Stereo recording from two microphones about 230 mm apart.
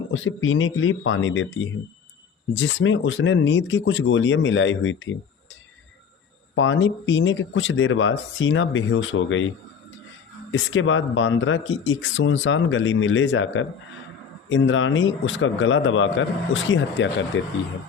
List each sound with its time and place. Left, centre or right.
0.1 s speech: left
6.6 s speech: left
10.5 s speech: left